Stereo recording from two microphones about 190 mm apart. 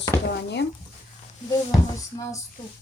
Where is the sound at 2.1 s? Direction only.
20° left (ahead or behind).